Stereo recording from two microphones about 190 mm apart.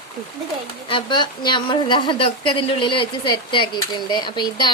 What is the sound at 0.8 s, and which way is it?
A woman's voice, 25° left (ahead or behind).